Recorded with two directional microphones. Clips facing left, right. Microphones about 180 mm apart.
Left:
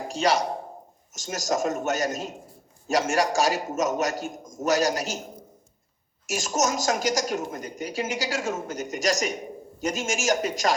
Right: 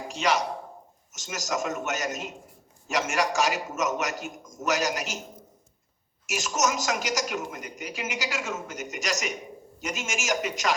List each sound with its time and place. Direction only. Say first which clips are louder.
0.1 s a man's voice: left 3 dB; 35° left (ahead or behind)
6.2 s speech: left 2 dB; 30° left (ahead or behind)